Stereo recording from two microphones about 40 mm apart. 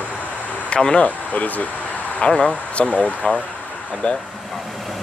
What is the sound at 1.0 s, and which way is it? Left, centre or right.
Speech, left.